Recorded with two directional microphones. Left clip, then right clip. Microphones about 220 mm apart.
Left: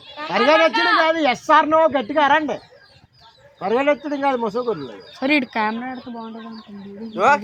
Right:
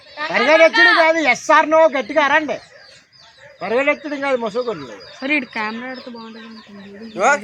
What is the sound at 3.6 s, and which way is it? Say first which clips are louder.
A man's voice: right 1 dB; 50° left (ahead or behind).